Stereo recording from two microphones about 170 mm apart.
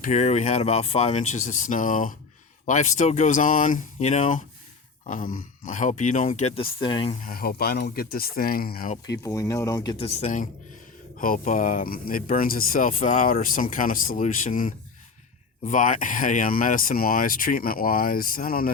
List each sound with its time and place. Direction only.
0.0 s speech: 45° left (ahead or behind)
7.2 s speech: 60° left (ahead or behind)
9.1 s speech: 20° left (ahead or behind)
10.0 s speech: 40° left (ahead or behind); by 18.7 s 55° left (ahead or behind)